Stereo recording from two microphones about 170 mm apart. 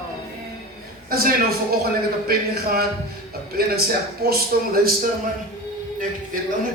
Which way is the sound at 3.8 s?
65° right (ahead or behind).